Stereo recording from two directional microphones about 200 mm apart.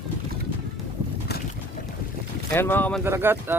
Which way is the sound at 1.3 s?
55° left (ahead or behind).